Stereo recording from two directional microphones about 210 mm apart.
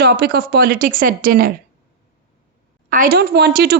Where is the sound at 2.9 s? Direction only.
40° right (ahead or behind).